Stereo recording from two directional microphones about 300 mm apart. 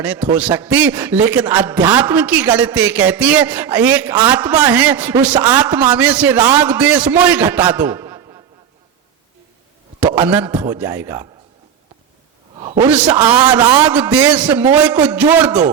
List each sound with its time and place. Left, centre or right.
0.0 s a man's voice: centre
10.0 s a man's voice: centre
12.5 s a sound: centre
12.9 s a man's voice: centre